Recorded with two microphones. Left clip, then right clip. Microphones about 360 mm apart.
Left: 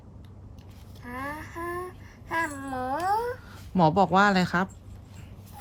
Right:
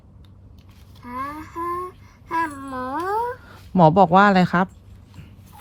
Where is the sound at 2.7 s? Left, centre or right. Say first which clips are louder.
Right 2 dB; centre.